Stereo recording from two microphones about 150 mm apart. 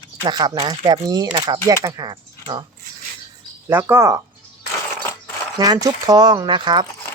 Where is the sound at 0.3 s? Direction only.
30° right (ahead or behind).